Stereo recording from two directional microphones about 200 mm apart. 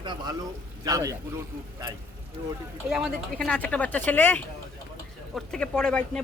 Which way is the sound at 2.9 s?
5° right (ahead or behind).